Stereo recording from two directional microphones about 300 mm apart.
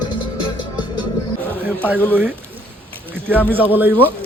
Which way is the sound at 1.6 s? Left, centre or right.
Centre.